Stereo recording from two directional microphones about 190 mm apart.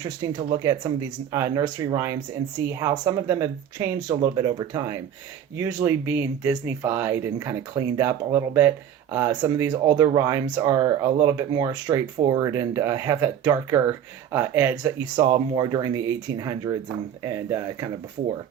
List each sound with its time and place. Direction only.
0.0 s speech: 20° right (ahead or behind)